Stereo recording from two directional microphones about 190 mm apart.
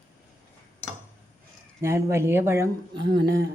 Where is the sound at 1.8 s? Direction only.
15° right (ahead or behind).